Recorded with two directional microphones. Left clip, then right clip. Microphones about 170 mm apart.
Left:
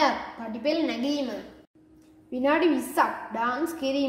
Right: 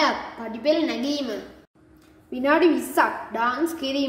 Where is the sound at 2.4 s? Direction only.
15° left (ahead or behind).